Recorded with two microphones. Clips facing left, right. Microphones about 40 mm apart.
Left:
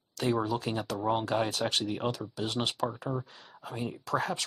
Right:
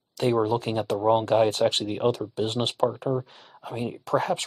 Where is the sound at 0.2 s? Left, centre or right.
Right.